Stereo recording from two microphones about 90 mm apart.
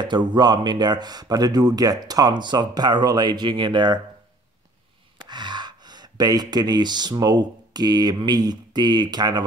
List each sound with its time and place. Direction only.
0.0 s speech: 60° right (ahead or behind)
5.3 s speech: 55° right (ahead or behind)